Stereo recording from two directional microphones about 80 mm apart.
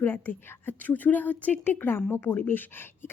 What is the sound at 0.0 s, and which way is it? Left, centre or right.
A woman's voice, left.